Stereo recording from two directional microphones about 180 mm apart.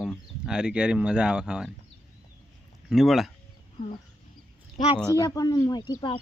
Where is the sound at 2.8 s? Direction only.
Centre (ahead or behind).